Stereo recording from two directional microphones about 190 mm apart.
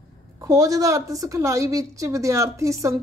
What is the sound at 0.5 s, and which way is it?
Speech, 20° right (ahead or behind).